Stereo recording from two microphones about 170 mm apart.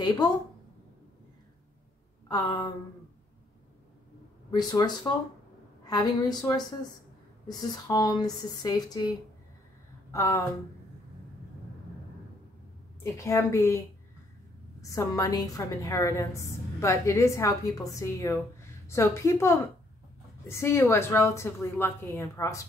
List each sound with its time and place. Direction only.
0.0 s a woman's voice: 25° left (ahead or behind)
2.2 s speech: 25° left (ahead or behind)
4.5 s speech: 25° left (ahead or behind)
10.1 s a woman's voice: 20° left (ahead or behind)
13.0 s a woman's voice: 15° left (ahead or behind)
14.8 s a woman's voice: 20° left (ahead or behind)